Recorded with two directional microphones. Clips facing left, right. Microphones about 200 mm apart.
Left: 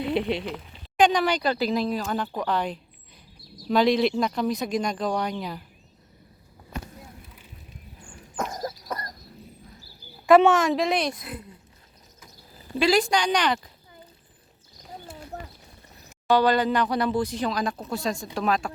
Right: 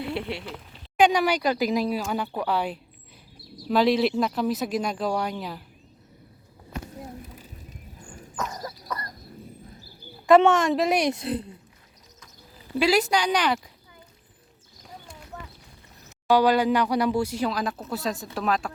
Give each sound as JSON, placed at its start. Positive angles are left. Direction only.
{"t": 0.0, "sound": "speech", "side_deg": 20}
{"t": 0.7, "sound": "speech", "side_deg": -10}
{"t": 8.4, "sound": "a sound", "side_deg": 35}
{"t": 10.2, "sound": "speech", "side_deg": 5}
{"t": 11.1, "sound": "speech", "side_deg": -30}
{"t": 12.8, "sound": "speech", "side_deg": -5}
{"t": 16.3, "sound": "speech", "side_deg": -10}